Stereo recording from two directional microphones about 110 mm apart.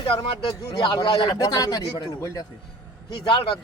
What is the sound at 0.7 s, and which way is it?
A man's voice, 40° left (ahead or behind).